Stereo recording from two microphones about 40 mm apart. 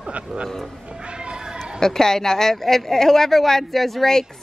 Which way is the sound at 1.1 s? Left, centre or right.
Right.